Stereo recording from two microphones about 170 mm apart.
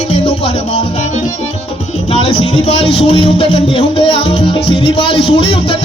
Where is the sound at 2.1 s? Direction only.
40° left (ahead or behind).